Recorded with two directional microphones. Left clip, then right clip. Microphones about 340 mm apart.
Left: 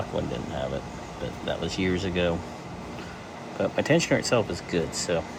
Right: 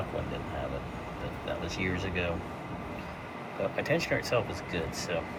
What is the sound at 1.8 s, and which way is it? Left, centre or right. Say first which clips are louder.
Speech: left 7 dB; left.